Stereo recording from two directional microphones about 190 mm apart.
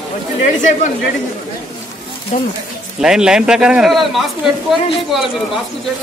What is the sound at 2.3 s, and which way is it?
Speech, 40° left (ahead or behind).